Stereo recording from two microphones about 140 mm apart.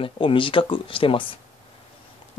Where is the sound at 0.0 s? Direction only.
40° left (ahead or behind).